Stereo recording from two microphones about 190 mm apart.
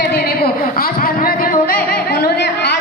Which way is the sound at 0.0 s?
60° left (ahead or behind).